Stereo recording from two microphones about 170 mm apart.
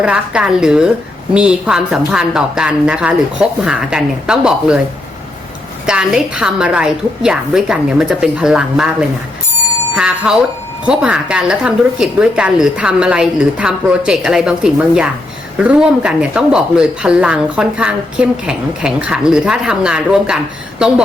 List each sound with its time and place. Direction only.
0.0 s a woman's voice: 5° right (ahead or behind)
5.8 s speech: 5° right (ahead or behind)